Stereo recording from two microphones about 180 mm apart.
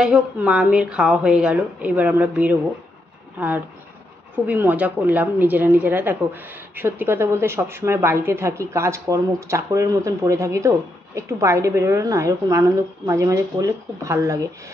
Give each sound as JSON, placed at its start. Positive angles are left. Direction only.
{"t": 0.0, "sound": "a woman's voice", "side_deg": -5}